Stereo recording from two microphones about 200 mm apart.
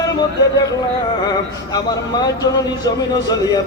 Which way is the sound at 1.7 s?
20° left (ahead or behind).